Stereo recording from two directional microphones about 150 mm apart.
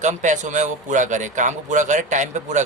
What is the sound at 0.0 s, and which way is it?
Speech, 55° right (ahead or behind).